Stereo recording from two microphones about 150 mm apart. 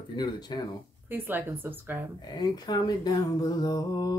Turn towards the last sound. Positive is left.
turn(degrees=25)  # may be behind; listen again after turning